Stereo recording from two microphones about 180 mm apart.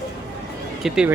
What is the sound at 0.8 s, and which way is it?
Speech, 5° right (ahead or behind).